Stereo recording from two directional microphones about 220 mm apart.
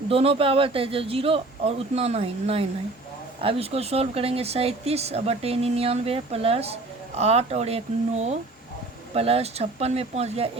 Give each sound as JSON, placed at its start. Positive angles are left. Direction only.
{"t": 0.1, "sound": "speech", "side_deg": -25}